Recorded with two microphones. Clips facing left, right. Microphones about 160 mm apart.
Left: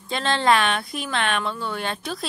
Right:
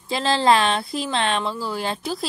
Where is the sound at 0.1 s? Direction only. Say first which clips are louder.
Right 2 dB; 30° right (ahead or behind).